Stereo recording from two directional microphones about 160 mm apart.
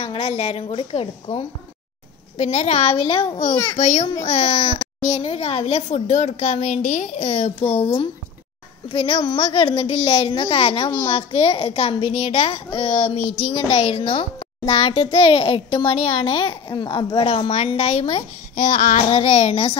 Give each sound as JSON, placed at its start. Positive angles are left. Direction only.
{"t": 0.0, "sound": "speech", "side_deg": 35}
{"t": 3.7, "sound": "a child's voice", "side_deg": 45}
{"t": 18.6, "sound": "child singing", "side_deg": 60}
{"t": 19.0, "sound": "speech", "side_deg": 40}